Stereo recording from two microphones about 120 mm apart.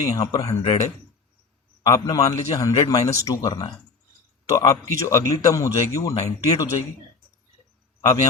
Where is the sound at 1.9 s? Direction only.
30° left (ahead or behind).